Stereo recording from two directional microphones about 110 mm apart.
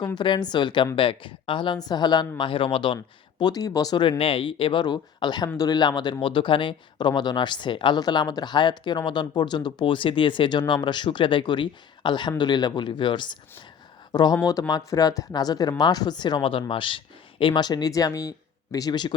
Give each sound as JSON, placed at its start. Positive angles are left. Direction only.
{"t": 0.0, "sound": "speech", "side_deg": 45}
{"t": 2.4, "sound": "speech", "side_deg": 50}
{"t": 4.2, "sound": "speech", "side_deg": 55}